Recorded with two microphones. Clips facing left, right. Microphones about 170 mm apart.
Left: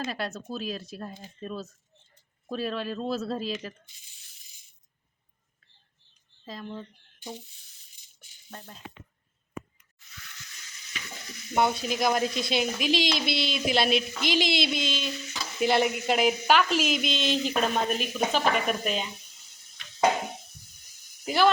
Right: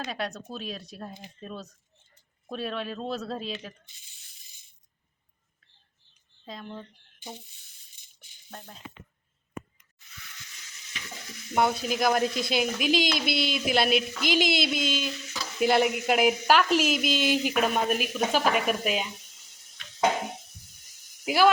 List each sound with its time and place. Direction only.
0.1 s speech: 5° left (ahead or behind)
6.4 s speech: centre (ahead or behind)
11.5 s speech: centre (ahead or behind)
21.2 s speech: 10° right (ahead or behind)